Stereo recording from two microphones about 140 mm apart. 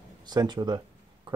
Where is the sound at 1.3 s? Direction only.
35° right (ahead or behind).